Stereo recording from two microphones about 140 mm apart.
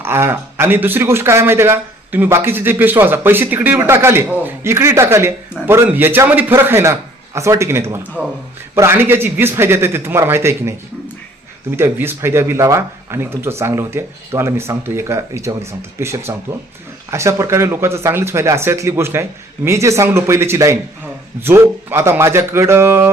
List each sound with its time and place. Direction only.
0.0 s speech: 15° right (ahead or behind)
11.8 s speech: 15° right (ahead or behind)